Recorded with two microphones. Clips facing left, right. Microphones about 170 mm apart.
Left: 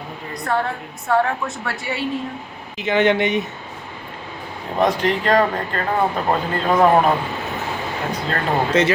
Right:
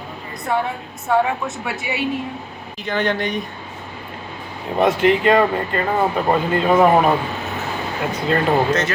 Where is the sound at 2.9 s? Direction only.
20° left (ahead or behind).